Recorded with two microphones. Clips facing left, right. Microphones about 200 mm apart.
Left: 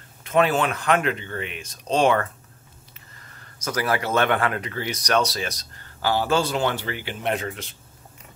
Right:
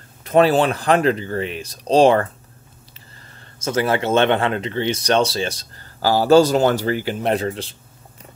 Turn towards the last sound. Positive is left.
turn(degrees=-30)  # may be behind; listen again after turning